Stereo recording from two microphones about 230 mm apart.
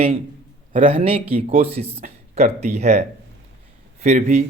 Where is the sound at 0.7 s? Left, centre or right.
Right.